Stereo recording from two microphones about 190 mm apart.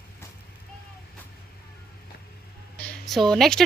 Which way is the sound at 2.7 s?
5° left (ahead or behind).